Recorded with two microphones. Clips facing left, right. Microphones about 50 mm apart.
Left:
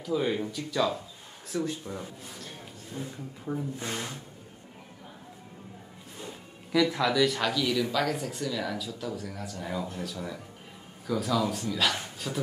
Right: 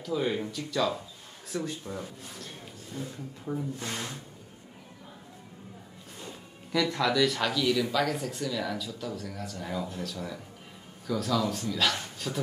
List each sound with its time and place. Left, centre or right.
0.0 s speech: centre
6.2 s speech: centre